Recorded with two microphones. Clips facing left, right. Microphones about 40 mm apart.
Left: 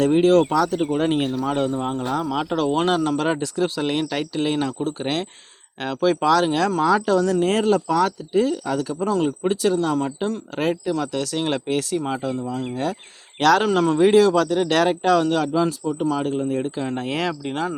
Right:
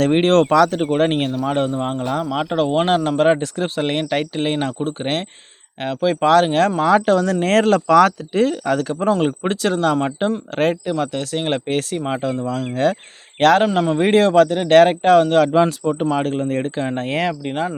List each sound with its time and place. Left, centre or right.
0.0 s speech: right
0.9 s speech: right
1.3 s speech: right
5.8 s speech: right
6.2 s speech: right
12.2 s speech: right
13.4 s speech: right
13.7 s speech: centre
14.0 s speech: right
16.9 s speech: right
17.2 s speech: right